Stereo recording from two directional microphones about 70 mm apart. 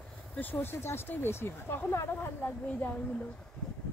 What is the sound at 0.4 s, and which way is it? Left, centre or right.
Speech, left.